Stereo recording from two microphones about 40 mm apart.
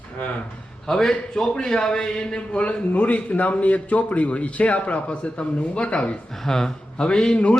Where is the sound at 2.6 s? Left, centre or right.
Left.